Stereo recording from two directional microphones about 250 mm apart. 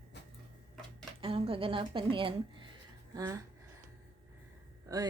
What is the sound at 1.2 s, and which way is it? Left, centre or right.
Speech, right.